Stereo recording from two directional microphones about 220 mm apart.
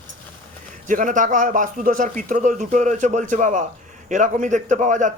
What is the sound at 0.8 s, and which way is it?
A man's voice, 35° right (ahead or behind).